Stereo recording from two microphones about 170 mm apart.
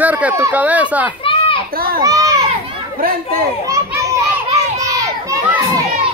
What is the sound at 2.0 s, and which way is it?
Children playing, 20° right (ahead or behind).